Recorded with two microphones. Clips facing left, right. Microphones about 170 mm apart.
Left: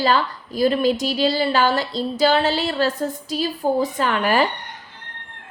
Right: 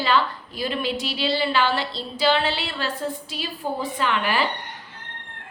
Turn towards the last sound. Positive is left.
turn(degrees=45)  # may be behind; listen again after turning